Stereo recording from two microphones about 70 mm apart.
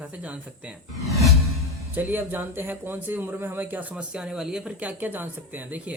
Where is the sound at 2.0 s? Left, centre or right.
Right.